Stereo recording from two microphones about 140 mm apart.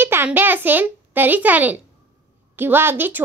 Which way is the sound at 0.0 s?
15° right (ahead or behind).